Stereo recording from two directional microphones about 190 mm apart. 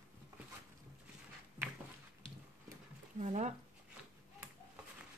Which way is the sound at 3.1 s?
35° right (ahead or behind).